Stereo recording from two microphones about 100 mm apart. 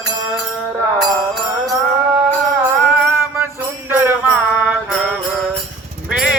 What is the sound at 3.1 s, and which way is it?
Music, 25° right (ahead or behind).